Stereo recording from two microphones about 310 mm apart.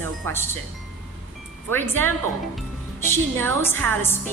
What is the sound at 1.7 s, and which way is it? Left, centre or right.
A woman's voice, centre.